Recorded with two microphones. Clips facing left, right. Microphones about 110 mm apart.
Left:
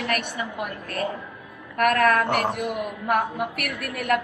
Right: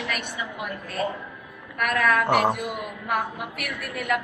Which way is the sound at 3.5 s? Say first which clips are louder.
Left 2 dB; 60° left (ahead or behind).